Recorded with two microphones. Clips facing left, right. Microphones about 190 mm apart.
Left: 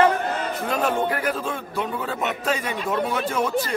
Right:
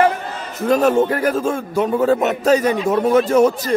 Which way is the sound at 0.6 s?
40° right (ahead or behind).